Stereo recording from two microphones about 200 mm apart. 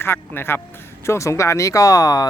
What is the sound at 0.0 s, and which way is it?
Speech, 10° left (ahead or behind).